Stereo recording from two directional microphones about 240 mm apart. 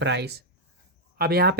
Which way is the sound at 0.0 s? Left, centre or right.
Right.